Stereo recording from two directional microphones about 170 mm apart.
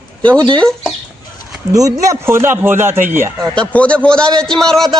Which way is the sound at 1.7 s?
20° right (ahead or behind).